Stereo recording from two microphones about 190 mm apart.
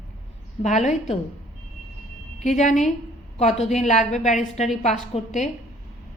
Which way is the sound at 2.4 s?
40° left (ahead or behind).